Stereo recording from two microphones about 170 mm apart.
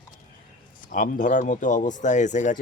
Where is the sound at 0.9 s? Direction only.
50° left (ahead or behind).